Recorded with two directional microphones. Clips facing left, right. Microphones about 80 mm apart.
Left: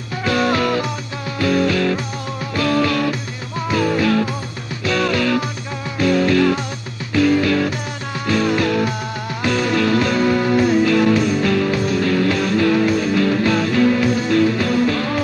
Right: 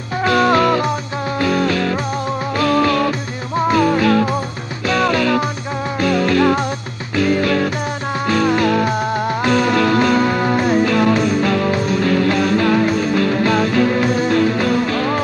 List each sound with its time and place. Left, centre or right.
0.2 s music: right